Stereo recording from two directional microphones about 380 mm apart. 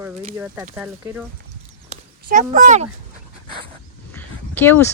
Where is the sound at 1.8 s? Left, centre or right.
Centre.